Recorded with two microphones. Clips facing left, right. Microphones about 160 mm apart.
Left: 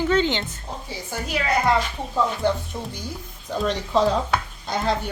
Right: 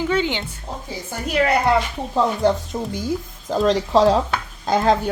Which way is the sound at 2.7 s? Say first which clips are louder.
Right 6 dB; 50° right (ahead or behind).